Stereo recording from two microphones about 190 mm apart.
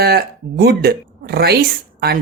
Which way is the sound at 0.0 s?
55° right (ahead or behind).